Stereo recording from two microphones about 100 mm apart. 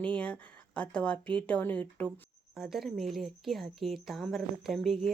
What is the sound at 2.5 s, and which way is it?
Speech, centre (ahead or behind).